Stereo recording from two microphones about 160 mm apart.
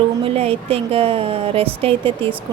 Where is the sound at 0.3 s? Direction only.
40° right (ahead or behind).